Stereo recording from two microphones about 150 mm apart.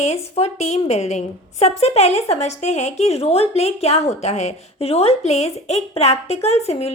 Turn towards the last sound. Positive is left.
turn(degrees=45)  # may be behind; listen again after turning